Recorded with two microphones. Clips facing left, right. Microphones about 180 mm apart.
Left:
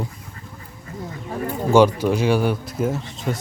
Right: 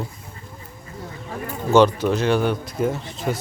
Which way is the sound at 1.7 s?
10° left (ahead or behind).